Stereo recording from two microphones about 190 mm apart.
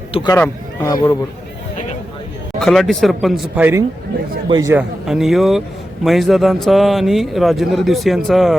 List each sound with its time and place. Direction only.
0.1 s speech: 25° left (ahead or behind)
0.3 s speech: 10° left (ahead or behind)
2.6 s a man's voice: centre (ahead or behind)
4.4 s a man's voice: 20° right (ahead or behind)
4.7 s a man's voice: 5° right (ahead or behind)